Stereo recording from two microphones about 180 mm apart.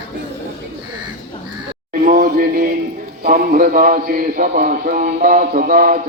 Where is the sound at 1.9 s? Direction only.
50° right (ahead or behind).